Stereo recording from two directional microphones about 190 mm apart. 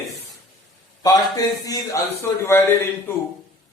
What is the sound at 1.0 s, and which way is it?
A man's voice, 20° left (ahead or behind).